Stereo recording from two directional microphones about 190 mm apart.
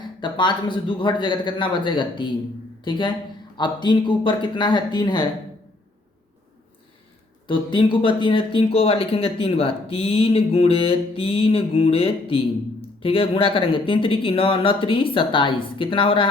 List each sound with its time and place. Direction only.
0.2 s speech: 25° left (ahead or behind)
7.4 s speech: 25° left (ahead or behind)